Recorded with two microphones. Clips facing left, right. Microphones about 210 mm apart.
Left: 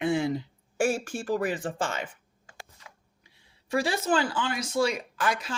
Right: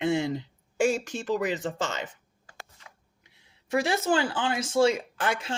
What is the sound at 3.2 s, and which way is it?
Speech, 20° right (ahead or behind).